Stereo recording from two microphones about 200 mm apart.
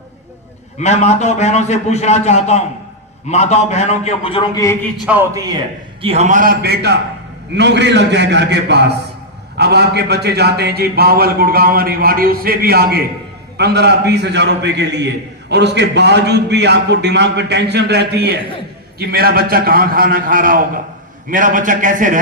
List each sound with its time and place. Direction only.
0.8 s a man's voice: 35° left (ahead or behind); by 4.8 s 15° left (ahead or behind)
4.9 s a man's voice: 10° right (ahead or behind)
6.0 s a man's voice: 30° right (ahead or behind)